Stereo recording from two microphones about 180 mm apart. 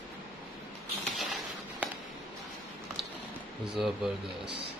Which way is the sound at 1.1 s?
Centre (ahead or behind).